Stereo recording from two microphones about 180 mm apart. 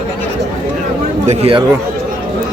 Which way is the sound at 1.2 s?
35° right (ahead or behind).